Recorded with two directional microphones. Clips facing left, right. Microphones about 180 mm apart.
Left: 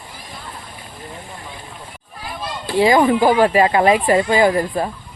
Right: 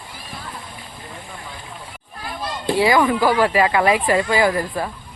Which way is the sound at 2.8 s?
30° left (ahead or behind).